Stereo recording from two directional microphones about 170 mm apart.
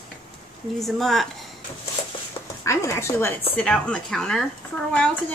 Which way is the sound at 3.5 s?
5° left (ahead or behind).